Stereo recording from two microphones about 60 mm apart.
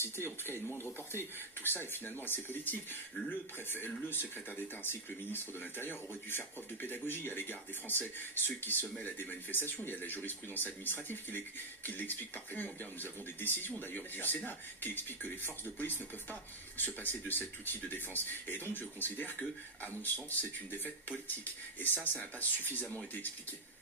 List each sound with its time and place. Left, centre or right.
1.6 s speech: left